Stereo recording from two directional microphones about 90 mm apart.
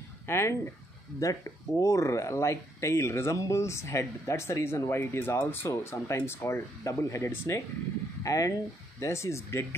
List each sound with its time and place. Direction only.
0.3 s speech: 30° left (ahead or behind)